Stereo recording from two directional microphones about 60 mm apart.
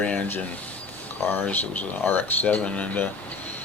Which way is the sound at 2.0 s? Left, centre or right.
Left.